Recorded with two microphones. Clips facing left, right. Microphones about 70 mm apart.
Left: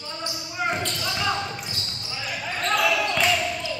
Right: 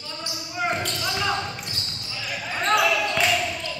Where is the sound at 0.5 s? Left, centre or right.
Centre.